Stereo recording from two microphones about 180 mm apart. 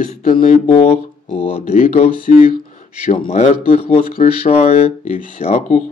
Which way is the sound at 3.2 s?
35° left (ahead or behind).